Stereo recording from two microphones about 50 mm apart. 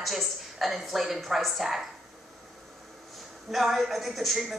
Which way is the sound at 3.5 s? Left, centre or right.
Centre.